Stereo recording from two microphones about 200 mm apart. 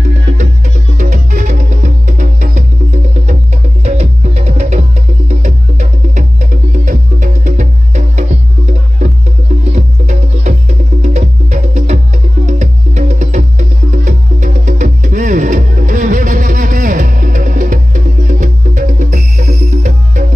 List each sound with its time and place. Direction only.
0.0 s music: 40° right (ahead or behind)
9.7 s music: 35° right (ahead or behind)